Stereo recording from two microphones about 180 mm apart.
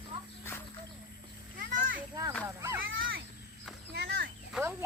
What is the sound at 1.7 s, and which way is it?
Children playing, 50° right (ahead or behind).